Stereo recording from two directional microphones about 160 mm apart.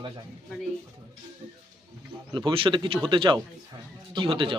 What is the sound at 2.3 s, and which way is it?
Speech, 30° right (ahead or behind).